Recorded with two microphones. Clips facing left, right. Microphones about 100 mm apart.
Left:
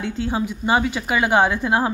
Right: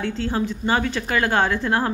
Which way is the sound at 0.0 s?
10° left (ahead or behind).